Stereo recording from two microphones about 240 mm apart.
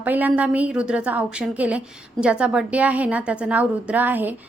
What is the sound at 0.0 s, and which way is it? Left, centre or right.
A woman's voice, centre.